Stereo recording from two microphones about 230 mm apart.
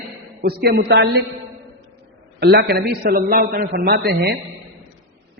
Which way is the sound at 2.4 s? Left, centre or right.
Right.